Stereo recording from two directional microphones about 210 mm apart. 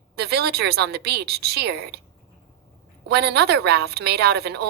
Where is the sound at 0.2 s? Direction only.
50° right (ahead or behind).